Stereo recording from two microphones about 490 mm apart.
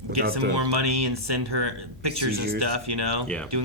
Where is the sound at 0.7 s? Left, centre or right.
Right.